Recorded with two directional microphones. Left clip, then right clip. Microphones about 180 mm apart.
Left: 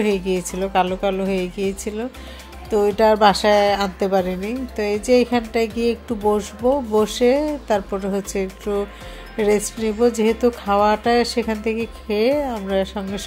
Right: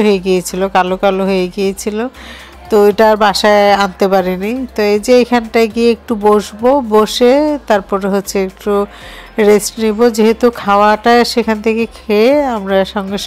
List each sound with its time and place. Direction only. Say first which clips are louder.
0.0 s speech: right 9 dB; 20° right (ahead or behind)